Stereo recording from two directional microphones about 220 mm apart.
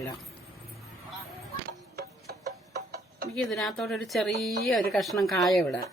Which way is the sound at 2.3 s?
45° right (ahead or behind).